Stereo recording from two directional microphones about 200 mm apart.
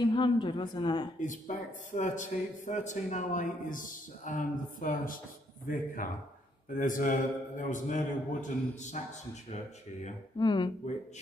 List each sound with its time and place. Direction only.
0.0 s a woman's voice: 25° left (ahead or behind)
1.2 s a man's voice: 40° left (ahead or behind)
10.4 s a woman's voice: 20° left (ahead or behind)